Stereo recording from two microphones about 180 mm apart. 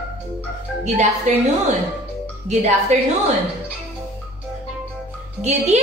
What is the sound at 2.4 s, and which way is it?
Speech, 40° right (ahead or behind).